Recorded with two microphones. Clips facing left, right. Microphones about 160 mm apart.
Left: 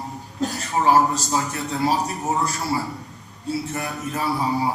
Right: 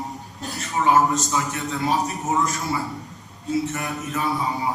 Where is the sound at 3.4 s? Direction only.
35° left (ahead or behind).